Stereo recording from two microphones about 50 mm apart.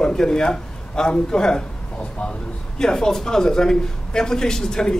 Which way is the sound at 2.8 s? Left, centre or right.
Centre.